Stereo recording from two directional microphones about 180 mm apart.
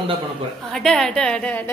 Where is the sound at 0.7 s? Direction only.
Centre (ahead or behind).